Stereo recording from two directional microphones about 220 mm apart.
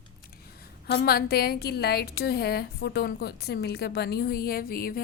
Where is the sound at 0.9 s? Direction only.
45° left (ahead or behind).